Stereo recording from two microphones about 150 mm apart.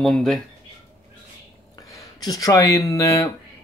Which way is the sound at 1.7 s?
25° left (ahead or behind).